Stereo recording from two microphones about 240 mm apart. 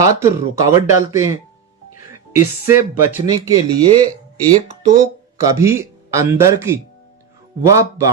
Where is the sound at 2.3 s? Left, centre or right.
Centre.